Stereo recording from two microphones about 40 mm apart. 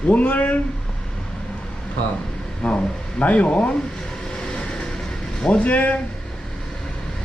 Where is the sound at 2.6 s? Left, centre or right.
Left.